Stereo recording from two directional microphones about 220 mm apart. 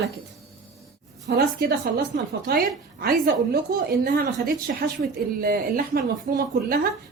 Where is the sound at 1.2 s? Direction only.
35° right (ahead or behind).